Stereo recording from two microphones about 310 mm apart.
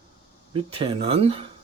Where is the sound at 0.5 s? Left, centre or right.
Centre.